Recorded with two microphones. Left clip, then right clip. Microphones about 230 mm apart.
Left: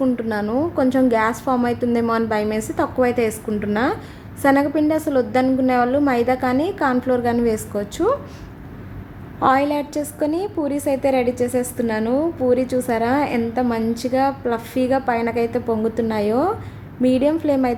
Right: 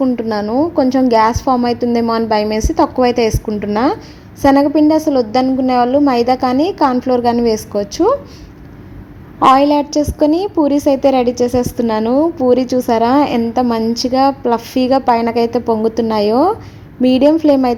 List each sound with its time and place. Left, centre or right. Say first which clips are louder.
0.0 s a woman's voice: right 5 dB; right
9.4 s a woman's voice: right 8 dB; right